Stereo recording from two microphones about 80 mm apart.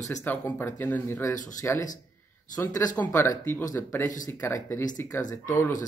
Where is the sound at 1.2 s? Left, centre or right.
Left.